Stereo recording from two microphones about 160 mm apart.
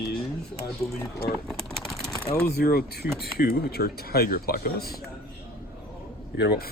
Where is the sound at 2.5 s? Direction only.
70° left (ahead or behind).